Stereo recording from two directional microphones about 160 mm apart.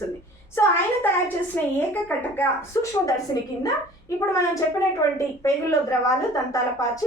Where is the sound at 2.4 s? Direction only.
20° left (ahead or behind).